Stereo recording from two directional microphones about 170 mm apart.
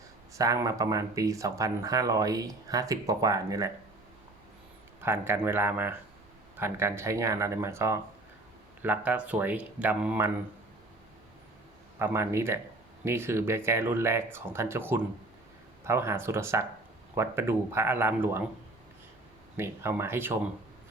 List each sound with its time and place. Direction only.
0.3 s speech: 20° right (ahead or behind)
5.0 s speech: 15° right (ahead or behind)
11.9 s speech: 15° right (ahead or behind)
19.5 s speech: 15° right (ahead or behind)